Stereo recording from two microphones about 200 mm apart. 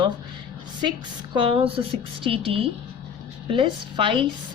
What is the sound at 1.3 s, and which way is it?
A woman's voice, 25° right (ahead or behind).